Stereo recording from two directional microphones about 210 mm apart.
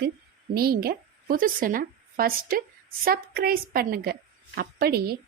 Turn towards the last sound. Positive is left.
turn(degrees=-50)  # may be behind; listen again after turning